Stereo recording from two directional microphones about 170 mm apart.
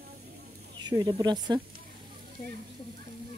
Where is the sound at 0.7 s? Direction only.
25° right (ahead or behind).